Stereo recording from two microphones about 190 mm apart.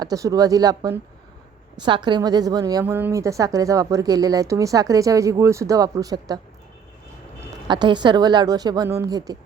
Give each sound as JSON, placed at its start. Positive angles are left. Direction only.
{"t": 0.0, "sound": "a woman's voice", "side_deg": -20}
{"t": 7.7, "sound": "a woman's voice", "side_deg": -25}